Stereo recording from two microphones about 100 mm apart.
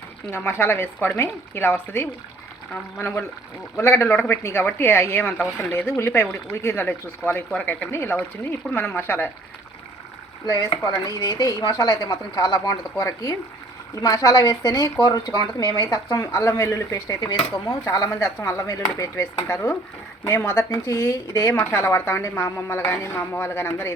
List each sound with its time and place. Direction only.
0.3 s a woman's voice: 20° left (ahead or behind)
7.9 s a woman's voice: 25° left (ahead or behind)
10.9 s a woman's voice: 45° left (ahead or behind); by 23.9 s 25° left (ahead or behind)